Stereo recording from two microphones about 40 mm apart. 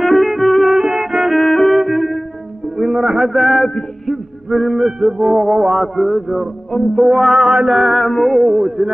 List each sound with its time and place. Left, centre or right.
0.0 s music: centre
0.7 s music: centre
1.3 s music: centre
1.8 s music: centre
2.8 s a sound: centre
4.0 s music: centre
4.7 s speech: centre
5.8 s a man's voice: centre
7.4 s speech: centre
7.7 s a man's voice: centre
8.4 s speech: centre